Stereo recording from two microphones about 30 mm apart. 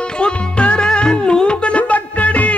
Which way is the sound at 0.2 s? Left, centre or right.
Left.